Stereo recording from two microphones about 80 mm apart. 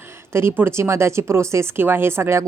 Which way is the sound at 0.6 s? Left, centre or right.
Right.